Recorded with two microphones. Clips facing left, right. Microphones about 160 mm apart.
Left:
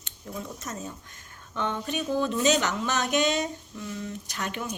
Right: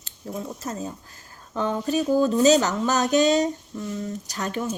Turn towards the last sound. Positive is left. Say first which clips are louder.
# right 5 dB
turn(degrees=-40)  # may be behind; listen again after turning